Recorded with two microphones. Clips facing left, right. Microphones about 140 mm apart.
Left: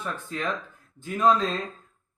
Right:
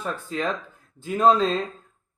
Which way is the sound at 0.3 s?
30° right (ahead or behind).